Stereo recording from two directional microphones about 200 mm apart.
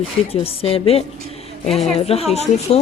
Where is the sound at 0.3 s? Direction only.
30° left (ahead or behind).